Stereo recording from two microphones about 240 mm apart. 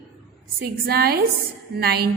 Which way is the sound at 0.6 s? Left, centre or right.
Right.